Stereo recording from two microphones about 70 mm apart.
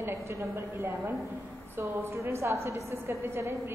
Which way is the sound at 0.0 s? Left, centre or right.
Right.